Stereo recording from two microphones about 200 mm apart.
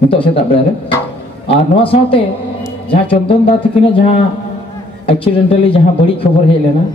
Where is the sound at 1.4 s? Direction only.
30° left (ahead or behind).